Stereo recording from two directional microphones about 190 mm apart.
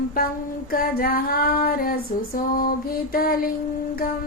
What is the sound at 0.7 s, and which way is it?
Female singing, 50° left (ahead or behind).